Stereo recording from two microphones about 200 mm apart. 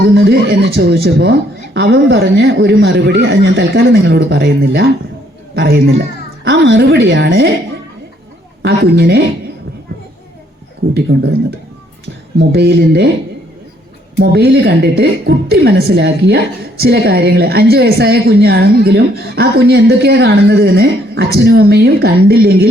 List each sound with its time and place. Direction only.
0.1 s speech: 55° right (ahead or behind)
8.6 s speech: 55° right (ahead or behind)
11.1 s a woman's voice: 50° right (ahead or behind)
12.4 s speech: 55° right (ahead or behind)
14.2 s a woman's voice: 55° right (ahead or behind)